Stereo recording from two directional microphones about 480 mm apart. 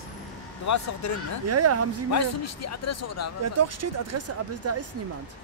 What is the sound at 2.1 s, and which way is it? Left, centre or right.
A man's voice, left.